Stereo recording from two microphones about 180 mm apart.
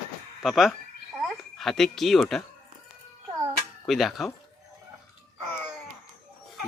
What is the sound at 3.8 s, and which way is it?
Speech, centre (ahead or behind).